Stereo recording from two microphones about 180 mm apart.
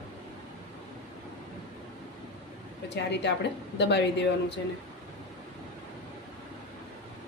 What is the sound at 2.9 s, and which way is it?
A woman's voice, 70° left (ahead or behind).